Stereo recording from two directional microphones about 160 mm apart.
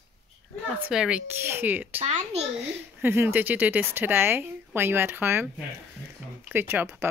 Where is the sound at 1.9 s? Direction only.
40° right (ahead or behind).